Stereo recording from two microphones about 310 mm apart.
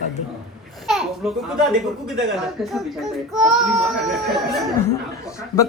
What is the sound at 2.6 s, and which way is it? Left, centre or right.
Speech, centre.